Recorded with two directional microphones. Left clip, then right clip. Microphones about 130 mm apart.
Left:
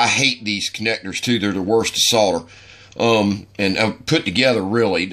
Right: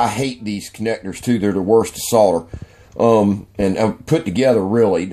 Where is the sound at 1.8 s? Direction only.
55° right (ahead or behind).